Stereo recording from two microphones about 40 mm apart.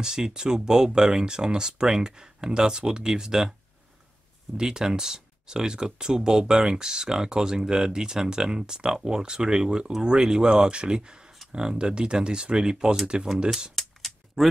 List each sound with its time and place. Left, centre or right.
0.0 s speech: centre
4.6 s speech: centre
13.7 s a sound: centre